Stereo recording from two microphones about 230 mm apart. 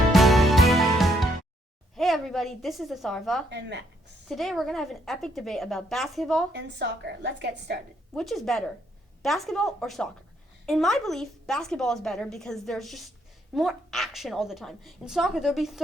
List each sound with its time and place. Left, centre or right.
0.1 s music: centre
2.0 s a woman's voice: centre
3.5 s a woman's voice: right
4.3 s a woman's voice: centre
6.5 s a woman's voice: right
8.1 s a woman's voice: centre